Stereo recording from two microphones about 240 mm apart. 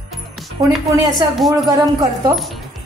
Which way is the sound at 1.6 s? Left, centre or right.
Centre.